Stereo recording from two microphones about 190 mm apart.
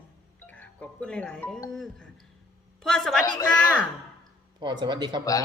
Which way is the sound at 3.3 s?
20° left (ahead or behind).